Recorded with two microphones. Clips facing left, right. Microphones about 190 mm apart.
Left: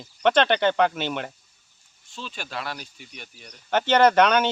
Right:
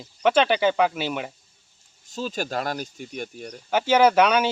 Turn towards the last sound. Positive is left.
turn(degrees=-5)  # may be behind; listen again after turning